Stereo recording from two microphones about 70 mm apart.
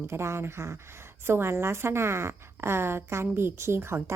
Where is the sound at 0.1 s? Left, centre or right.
Right.